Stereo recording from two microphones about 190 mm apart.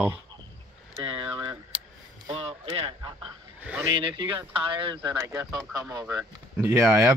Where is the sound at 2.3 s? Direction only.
30° right (ahead or behind).